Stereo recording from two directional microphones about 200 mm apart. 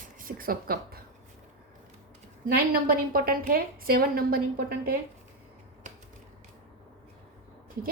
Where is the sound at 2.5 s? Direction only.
50° right (ahead or behind).